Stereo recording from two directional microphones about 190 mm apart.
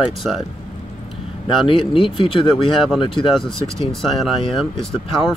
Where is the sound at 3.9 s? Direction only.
Centre (ahead or behind).